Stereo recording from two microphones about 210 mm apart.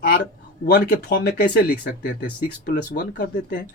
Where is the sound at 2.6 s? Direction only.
45° left (ahead or behind).